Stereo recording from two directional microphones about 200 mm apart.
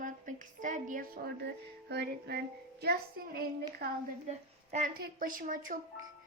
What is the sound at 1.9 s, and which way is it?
Music, 55° right (ahead or behind).